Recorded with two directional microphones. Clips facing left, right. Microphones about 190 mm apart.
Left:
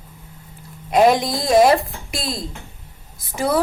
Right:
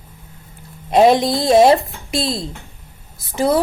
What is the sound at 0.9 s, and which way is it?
A woman's voice, 25° right (ahead or behind).